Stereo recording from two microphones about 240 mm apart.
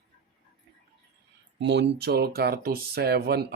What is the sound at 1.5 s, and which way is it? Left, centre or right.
Speech, right.